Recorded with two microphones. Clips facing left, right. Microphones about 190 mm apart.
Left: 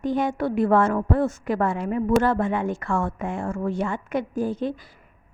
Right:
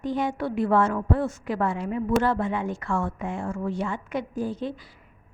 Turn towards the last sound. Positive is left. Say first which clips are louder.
# left 4 dB
turn(degrees=50)  # may be behind; listen again after turning